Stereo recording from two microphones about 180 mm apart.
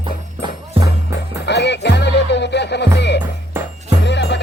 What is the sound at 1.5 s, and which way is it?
Music, 70° left (ahead or behind).